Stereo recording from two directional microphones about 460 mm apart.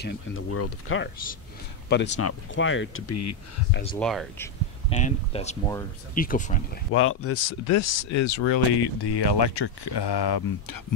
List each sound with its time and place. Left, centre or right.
0.0 s speech: left
3.9 s speech: centre
4.8 s speech: centre; by 8.4 s left
8.4 s speech: left